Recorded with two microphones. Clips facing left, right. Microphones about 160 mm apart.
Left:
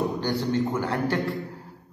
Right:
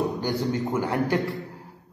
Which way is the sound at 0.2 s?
20° right (ahead or behind).